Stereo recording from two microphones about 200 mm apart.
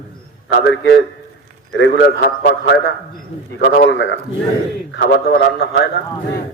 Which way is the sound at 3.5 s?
65° left (ahead or behind).